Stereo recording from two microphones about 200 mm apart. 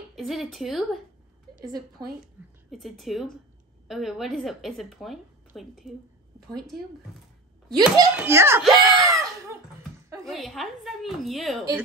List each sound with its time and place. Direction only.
0.1 s a woman's voice: centre (ahead or behind)
1.6 s a woman's voice: 20° right (ahead or behind)
2.4 s a sound: 10° right (ahead or behind)
2.7 s a woman's voice: centre (ahead or behind)
7.7 s a woman's voice: 20° right (ahead or behind)
8.1 s a child's voice: 10° right (ahead or behind)
8.6 s a sound: centre (ahead or behind)
10.2 s a woman's voice: centre (ahead or behind)